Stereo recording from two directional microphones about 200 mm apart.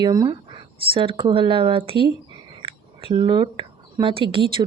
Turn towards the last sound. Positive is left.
turn(degrees=-25)  # may be behind; listen again after turning